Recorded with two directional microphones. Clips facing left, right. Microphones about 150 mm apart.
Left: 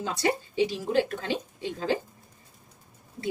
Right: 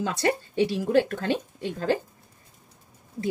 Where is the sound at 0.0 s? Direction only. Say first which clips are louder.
Right 2 dB; 60° right (ahead or behind).